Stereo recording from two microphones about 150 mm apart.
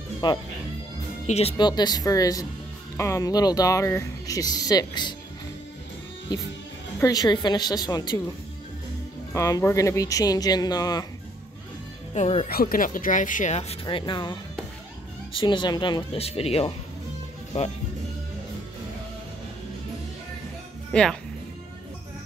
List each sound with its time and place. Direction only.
0.2 s speech: 30° left (ahead or behind)
1.2 s speech: 45° left (ahead or behind)
1.6 s speech: 30° left (ahead or behind)
7.0 s speech: 25° left (ahead or behind)
9.3 s speech: 20° left (ahead or behind)
12.1 s speech: 45° left (ahead or behind)
12.4 s speech: 80° left; by 13.6 s 60° left (ahead or behind)
13.6 s speech: 40° left (ahead or behind)
20.9 s speech: 5° left (ahead or behind)